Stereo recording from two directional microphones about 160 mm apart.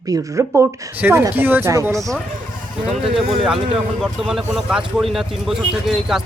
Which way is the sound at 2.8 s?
Centre (ahead or behind).